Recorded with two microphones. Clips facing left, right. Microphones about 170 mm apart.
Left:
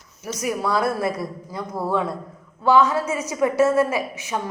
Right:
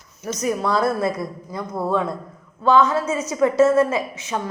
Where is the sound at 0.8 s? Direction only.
20° right (ahead or behind).